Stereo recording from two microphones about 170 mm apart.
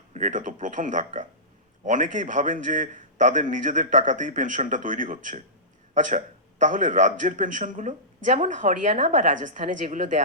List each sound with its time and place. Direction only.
0.1 s a man's voice: 45° right (ahead or behind)